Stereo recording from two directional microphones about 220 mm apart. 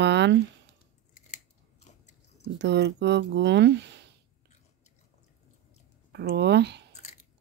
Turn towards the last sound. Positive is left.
turn(degrees=30)  # may be behind; listen again after turning